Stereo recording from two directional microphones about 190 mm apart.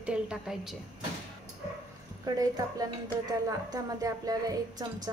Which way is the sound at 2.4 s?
20° right (ahead or behind).